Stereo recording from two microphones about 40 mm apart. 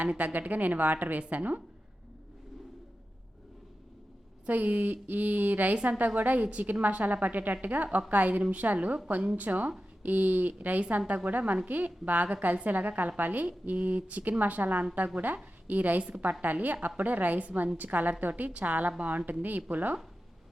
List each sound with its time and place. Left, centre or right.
0.0 s a woman's voice: right
4.4 s a woman's voice: right
5.7 s a woman's voice: right
6.1 s a woman's voice: right